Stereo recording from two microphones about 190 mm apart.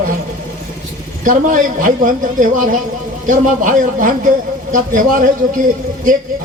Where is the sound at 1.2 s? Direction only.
45° right (ahead or behind).